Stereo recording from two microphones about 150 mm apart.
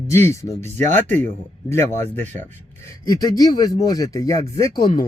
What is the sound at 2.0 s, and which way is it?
Speech, 50° right (ahead or behind).